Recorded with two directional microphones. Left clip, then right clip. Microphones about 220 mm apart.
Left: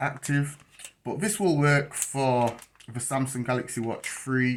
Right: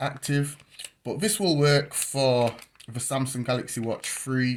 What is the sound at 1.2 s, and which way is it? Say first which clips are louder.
Speech: right 1 dB; 55° right (ahead or behind).